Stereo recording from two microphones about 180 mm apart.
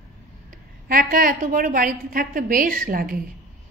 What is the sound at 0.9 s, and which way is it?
A woman's voice, 50° right (ahead or behind).